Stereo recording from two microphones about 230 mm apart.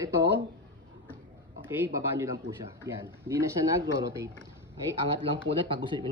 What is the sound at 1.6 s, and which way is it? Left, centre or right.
Speech, centre.